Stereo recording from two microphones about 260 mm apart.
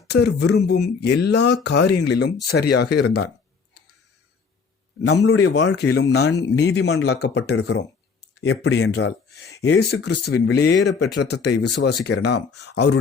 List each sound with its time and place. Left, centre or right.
0.1 s speech: left
5.0 s a man's voice: left
5.5 s speech: left